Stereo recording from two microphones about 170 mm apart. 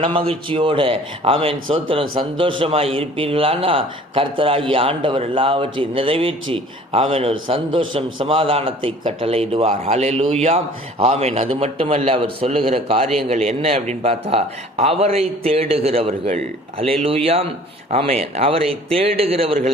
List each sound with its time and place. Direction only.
0.0 s a man's voice: 30° right (ahead or behind)